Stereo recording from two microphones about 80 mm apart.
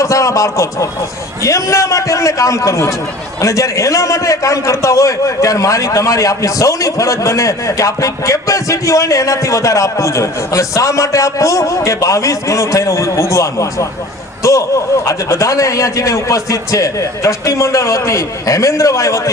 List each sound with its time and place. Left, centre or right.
0.0 s a man's voice: left